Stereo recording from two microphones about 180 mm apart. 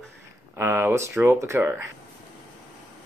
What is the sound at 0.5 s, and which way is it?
Speech, 10° right (ahead or behind).